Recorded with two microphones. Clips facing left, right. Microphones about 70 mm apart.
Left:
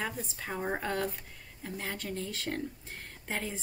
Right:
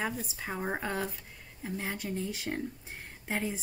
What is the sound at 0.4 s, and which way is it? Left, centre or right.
Speech, centre.